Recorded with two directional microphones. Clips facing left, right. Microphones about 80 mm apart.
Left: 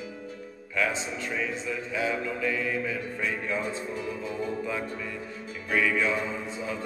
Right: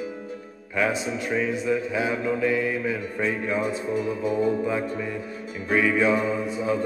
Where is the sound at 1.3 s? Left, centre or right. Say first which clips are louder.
Right 8 dB; right.